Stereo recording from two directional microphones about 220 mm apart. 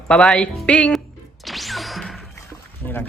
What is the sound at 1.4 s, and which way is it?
Whoosh, centre (ahead or behind).